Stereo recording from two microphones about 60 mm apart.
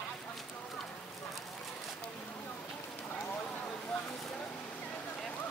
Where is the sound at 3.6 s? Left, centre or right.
Left.